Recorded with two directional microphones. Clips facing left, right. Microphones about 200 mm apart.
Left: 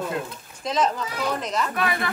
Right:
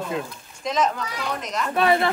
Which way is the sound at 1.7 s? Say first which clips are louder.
Right 6 dB; 25° right (ahead or behind).